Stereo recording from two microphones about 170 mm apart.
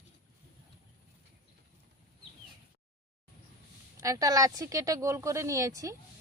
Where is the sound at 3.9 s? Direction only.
20° right (ahead or behind).